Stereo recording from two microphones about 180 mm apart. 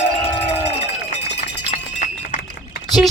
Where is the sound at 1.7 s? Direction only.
45° left (ahead or behind).